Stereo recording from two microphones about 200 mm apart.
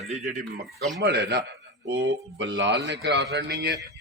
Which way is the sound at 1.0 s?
55° right (ahead or behind).